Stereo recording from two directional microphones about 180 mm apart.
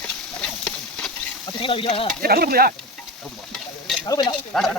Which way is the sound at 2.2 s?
60° right (ahead or behind).